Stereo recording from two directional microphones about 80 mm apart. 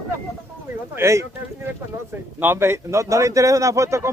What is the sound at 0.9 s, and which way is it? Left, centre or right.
Speech, right.